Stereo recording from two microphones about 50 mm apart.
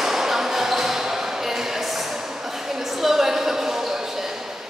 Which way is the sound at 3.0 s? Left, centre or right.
Centre.